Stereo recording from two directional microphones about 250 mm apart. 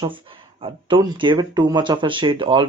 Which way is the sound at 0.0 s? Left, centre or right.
Right.